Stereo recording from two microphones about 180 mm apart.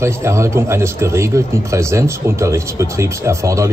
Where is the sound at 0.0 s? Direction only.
15° right (ahead or behind).